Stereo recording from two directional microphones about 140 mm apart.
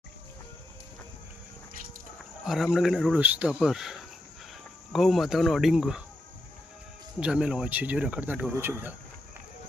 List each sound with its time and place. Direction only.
2.4 s speech: 5° right (ahead or behind)
7.2 s speech: 5° right (ahead or behind)